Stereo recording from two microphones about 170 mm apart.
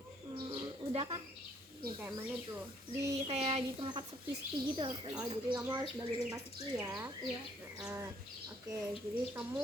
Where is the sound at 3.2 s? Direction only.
35° right (ahead or behind); by 6.4 s 20° right (ahead or behind).